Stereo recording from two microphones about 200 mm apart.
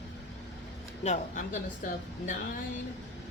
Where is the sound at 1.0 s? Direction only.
35° left (ahead or behind).